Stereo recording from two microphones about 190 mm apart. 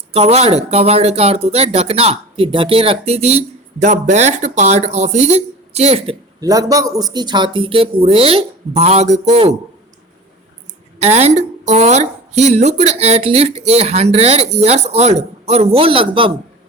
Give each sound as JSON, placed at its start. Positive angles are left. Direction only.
{"t": 0.1, "sound": "speech", "side_deg": -30}
{"t": 6.4, "sound": "speech", "side_deg": -20}
{"t": 11.0, "sound": "speech", "side_deg": -35}